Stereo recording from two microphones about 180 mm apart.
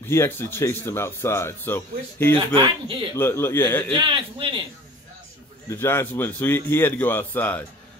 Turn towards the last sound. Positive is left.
turn(degrees=10)  # may be behind; listen again after turning